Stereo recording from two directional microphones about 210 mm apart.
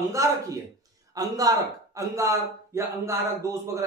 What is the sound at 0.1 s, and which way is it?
A man's voice, 15° right (ahead or behind).